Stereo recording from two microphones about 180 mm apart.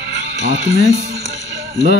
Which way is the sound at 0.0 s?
85° right.